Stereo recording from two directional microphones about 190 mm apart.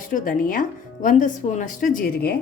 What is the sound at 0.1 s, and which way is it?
A woman's voice, 45° left (ahead or behind).